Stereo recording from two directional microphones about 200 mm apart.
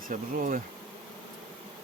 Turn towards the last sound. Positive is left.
turn(degrees=-40)  # may be behind; listen again after turning